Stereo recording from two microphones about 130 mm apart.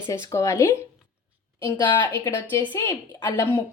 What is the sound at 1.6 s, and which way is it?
Speech, 35° left (ahead or behind).